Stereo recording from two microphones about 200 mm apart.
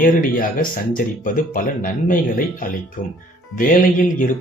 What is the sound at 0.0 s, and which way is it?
Speech, 45° left (ahead or behind).